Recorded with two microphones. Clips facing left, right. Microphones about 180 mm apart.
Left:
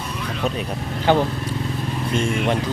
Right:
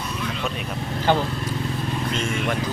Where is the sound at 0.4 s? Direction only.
35° left (ahead or behind).